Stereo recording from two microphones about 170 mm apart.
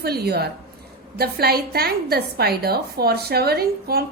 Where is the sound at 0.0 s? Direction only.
70° right (ahead or behind).